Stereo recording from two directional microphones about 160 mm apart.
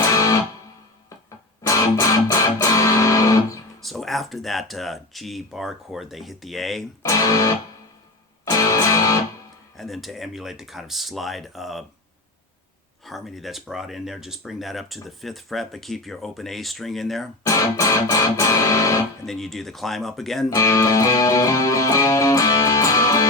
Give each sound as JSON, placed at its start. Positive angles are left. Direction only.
{"t": 0.1, "sound": "music", "side_deg": 20}
{"t": 1.6, "sound": "music", "side_deg": 20}
{"t": 3.8, "sound": "speech", "side_deg": 0}
{"t": 7.2, "sound": "music", "side_deg": 20}
{"t": 9.7, "sound": "speech", "side_deg": 0}
{"t": 13.1, "sound": "speech", "side_deg": 0}
{"t": 17.4, "sound": "music", "side_deg": 20}
{"t": 19.2, "sound": "speech", "side_deg": 0}
{"t": 20.5, "sound": "music", "side_deg": 20}